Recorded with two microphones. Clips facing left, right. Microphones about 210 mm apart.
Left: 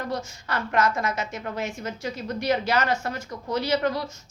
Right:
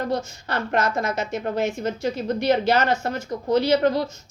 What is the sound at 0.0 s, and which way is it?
A woman's voice, 30° right (ahead or behind).